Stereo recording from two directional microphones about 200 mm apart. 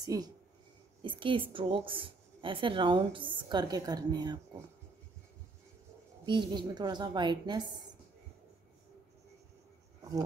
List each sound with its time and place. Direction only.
0.0 s a woman's voice: 20° right (ahead or behind)
6.2 s a woman's voice: 20° right (ahead or behind)